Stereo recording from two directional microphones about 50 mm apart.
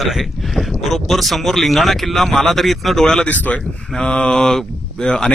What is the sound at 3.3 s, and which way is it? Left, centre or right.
Speech, left.